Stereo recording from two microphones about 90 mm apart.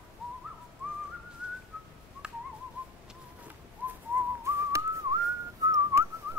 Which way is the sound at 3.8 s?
20° right (ahead or behind).